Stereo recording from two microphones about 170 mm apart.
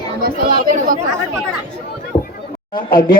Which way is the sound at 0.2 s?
60° right (ahead or behind).